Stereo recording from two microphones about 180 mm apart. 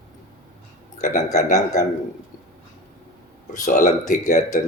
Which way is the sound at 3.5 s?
45° left (ahead or behind).